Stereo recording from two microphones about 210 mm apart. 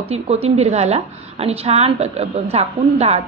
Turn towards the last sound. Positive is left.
turn(degrees=-30)  # may be behind; listen again after turning